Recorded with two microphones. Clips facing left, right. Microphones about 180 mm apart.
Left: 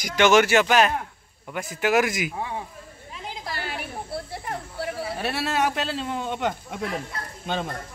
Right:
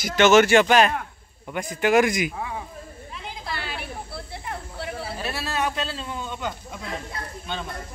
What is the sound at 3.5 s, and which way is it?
Snake, 45° left (ahead or behind).